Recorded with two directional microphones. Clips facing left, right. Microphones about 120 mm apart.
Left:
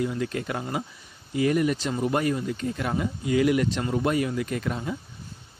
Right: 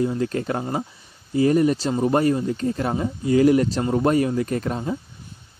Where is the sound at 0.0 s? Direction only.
35° right (ahead or behind).